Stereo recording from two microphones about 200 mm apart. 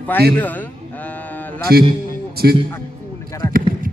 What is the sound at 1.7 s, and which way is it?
Speech, 50° right (ahead or behind).